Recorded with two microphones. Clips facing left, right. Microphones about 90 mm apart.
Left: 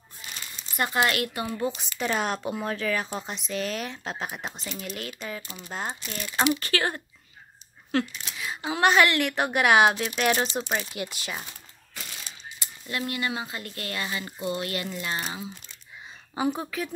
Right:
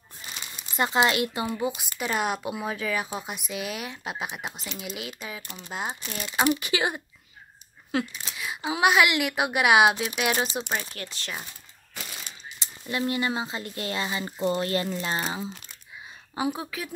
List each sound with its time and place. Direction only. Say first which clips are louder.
0.2 s crumpling: right 1 dB; 40° right (ahead or behind)
0.7 s speech: right 2 dB; 20° right (ahead or behind)
1.8 s a woman's voice: even; 5° right (ahead or behind)
11.0 s speech: left 4 dB; 10° left (ahead or behind)
11.9 s a sound: right 2 dB; 5° right (ahead or behind)
12.5 s speech: right 3 dB; 25° right (ahead or behind)
16.3 s a woman's voice: left 2 dB; centre (ahead or behind)